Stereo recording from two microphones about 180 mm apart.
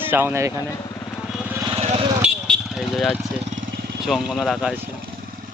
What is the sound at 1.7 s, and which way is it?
Vehicle, 35° right (ahead or behind).